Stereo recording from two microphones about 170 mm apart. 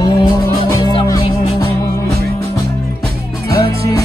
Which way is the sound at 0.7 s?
25° left (ahead or behind).